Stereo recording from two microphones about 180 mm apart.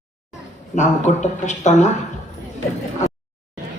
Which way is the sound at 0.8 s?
40° left (ahead or behind).